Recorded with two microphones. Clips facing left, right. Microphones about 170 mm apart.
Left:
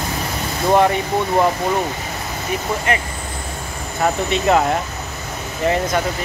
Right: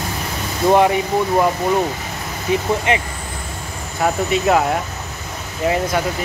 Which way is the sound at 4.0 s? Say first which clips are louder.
Right 1 dB; centre (ahead or behind).